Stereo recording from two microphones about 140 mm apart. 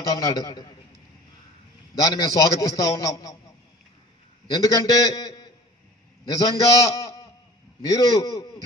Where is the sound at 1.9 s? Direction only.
25° left (ahead or behind).